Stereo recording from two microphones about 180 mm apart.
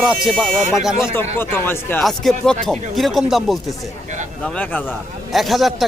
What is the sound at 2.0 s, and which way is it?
A man's voice, centre (ahead or behind).